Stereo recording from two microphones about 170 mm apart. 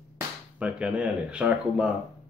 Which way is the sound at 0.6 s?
5° right (ahead or behind).